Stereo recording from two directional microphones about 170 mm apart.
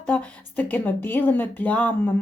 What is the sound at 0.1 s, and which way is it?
A woman's voice, 10° left (ahead or behind).